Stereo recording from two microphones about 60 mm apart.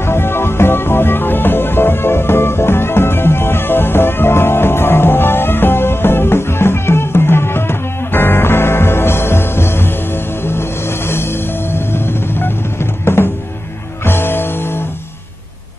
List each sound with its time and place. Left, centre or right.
0.0 s music: left